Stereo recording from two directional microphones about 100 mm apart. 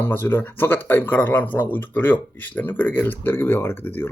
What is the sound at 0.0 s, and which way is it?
Speech, 20° left (ahead or behind).